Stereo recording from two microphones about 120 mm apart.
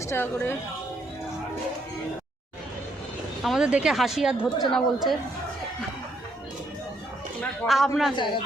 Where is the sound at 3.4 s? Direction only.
5° right (ahead or behind).